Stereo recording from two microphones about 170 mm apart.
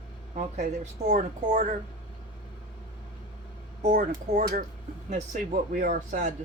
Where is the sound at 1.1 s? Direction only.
45° right (ahead or behind).